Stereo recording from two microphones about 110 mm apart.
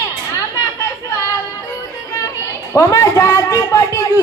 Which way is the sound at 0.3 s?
30° left (ahead or behind).